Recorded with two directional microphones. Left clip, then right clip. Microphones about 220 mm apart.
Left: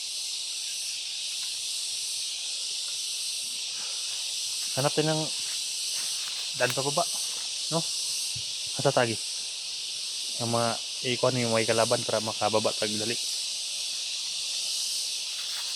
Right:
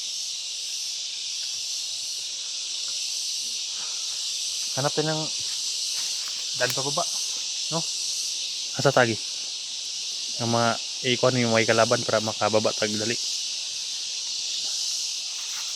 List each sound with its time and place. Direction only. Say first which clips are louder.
4.8 s speech: even; 5° right (ahead or behind)
6.6 s speech: right 1 dB; 5° right (ahead or behind)
8.8 s speech: right 5 dB; 30° right (ahead or behind)
10.4 s speech: right 4 dB; 40° right (ahead or behind)